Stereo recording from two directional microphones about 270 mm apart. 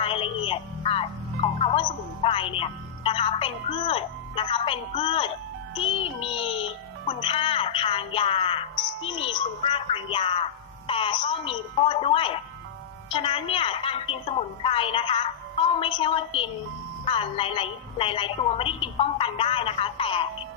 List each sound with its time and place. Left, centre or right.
0.0 s music: centre
5.7 s a child's voice: centre